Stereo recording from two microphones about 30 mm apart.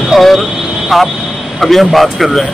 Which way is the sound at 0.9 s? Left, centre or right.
Centre.